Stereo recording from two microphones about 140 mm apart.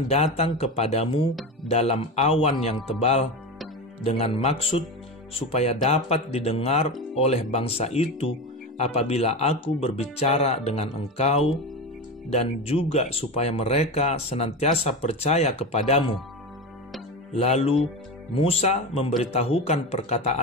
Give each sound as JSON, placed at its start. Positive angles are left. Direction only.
{"t": 0.6, "sound": "speech", "side_deg": 45}
{"t": 17.3, "sound": "speech", "side_deg": 50}